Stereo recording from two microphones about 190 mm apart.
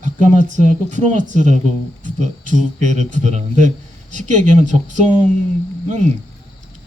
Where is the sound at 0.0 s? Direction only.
40° right (ahead or behind).